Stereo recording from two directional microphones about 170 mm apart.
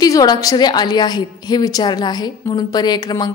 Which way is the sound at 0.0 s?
20° left (ahead or behind).